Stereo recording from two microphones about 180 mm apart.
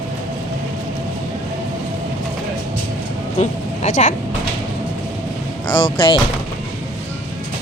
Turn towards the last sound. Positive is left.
turn(degrees=25)  # may be behind; listen again after turning